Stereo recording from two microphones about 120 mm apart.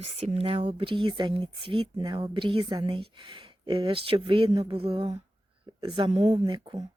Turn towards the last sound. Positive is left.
turn(degrees=-40)  # may be behind; listen again after turning